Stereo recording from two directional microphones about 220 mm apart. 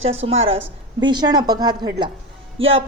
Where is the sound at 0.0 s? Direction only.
25° right (ahead or behind).